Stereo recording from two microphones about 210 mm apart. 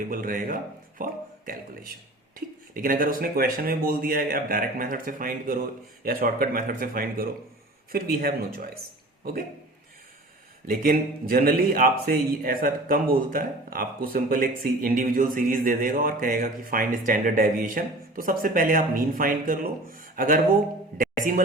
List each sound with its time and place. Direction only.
0.1 s a man's voice: 40° right (ahead or behind)
10.7 s a man's voice: 45° right (ahead or behind)